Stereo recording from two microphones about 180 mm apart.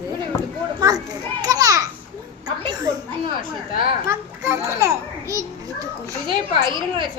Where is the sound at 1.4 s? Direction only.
20° right (ahead or behind).